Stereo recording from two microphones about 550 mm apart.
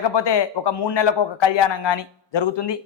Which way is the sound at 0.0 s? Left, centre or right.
Left.